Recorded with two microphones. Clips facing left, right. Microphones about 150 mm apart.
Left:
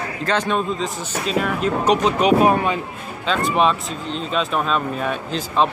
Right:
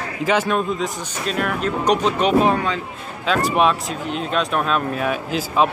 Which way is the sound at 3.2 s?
5° right (ahead or behind).